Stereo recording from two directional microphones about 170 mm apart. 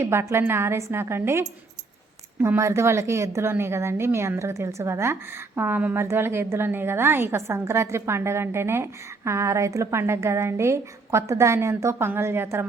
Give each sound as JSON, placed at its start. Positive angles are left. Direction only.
{"t": 0.0, "sound": "a woman's voice", "side_deg": -15}